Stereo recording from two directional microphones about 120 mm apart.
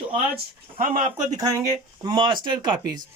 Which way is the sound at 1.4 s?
30° right (ahead or behind).